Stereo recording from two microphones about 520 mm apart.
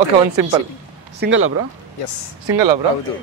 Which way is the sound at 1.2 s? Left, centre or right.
Right.